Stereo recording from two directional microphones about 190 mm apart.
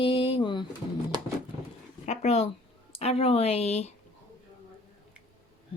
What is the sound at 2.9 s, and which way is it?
Speech, 30° left (ahead or behind).